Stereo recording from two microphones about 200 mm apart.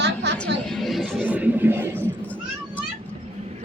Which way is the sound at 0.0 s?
55° right (ahead or behind).